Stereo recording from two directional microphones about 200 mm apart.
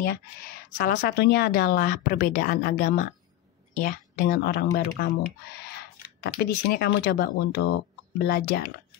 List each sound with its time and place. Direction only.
0.7 s speech: 50° left (ahead or behind)